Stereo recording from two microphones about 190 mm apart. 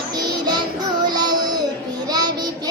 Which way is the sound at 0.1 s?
20° right (ahead or behind).